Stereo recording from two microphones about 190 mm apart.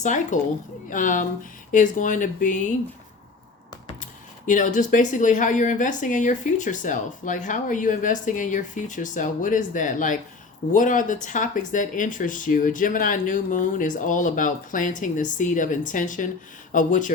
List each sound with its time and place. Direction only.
0.0 s speech: 40° left (ahead or behind)
4.4 s speech: 40° left (ahead or behind)